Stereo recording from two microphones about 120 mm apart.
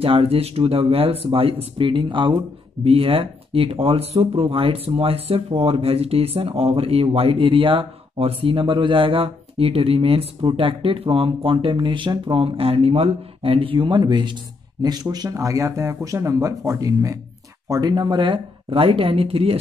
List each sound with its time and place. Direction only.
0.0 s speech: 50° right (ahead or behind)